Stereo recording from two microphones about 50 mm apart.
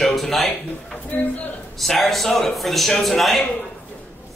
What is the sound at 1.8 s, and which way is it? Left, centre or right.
A man's voice, centre.